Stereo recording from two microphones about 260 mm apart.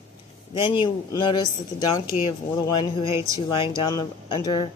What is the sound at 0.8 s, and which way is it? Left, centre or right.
A woman's voice, centre.